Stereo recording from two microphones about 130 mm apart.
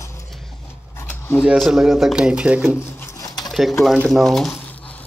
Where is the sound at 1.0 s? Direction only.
15° left (ahead or behind).